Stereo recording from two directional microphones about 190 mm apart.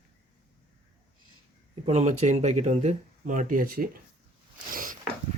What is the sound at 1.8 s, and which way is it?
Speech, 35° right (ahead or behind).